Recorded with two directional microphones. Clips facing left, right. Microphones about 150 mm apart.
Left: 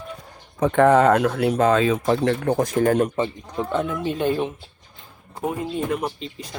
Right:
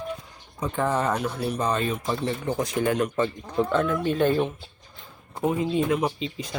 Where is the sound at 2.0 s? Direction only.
75° left (ahead or behind); by 3.1 s 45° left (ahead or behind).